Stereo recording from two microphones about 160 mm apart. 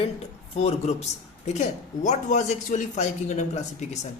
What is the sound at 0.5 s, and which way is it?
Speech, 40° left (ahead or behind).